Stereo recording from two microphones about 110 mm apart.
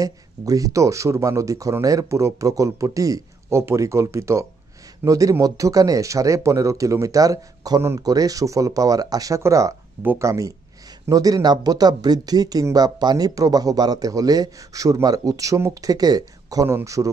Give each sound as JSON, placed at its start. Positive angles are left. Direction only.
{"t": 0.0, "sound": "speech", "side_deg": -30}